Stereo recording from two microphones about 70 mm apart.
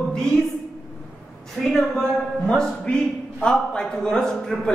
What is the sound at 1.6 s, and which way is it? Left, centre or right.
A man's voice, centre.